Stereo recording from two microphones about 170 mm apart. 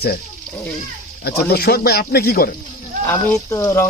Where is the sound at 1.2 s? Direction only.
70° left (ahead or behind).